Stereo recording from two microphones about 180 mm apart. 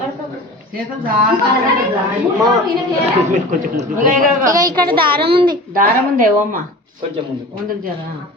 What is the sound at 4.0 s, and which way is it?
Speech, 45° right (ahead or behind).